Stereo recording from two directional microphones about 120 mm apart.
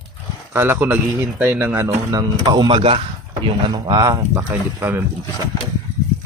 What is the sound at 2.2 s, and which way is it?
A man's voice, 35° right (ahead or behind).